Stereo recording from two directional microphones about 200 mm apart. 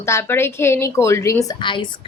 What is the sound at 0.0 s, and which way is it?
A woman's voice, 10° left (ahead or behind).